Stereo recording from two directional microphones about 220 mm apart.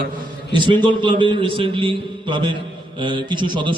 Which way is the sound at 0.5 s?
20° right (ahead or behind).